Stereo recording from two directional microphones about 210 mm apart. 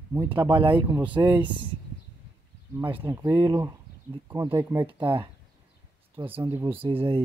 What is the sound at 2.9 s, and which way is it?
Speech, 25° right (ahead or behind).